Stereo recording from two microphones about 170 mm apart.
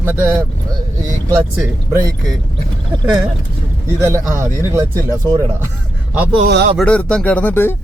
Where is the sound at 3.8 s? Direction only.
15° right (ahead or behind).